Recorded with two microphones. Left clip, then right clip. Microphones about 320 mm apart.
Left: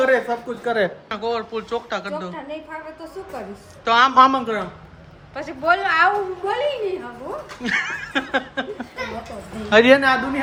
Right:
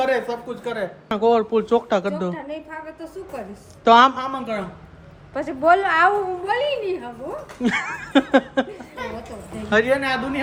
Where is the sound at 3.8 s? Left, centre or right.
Centre.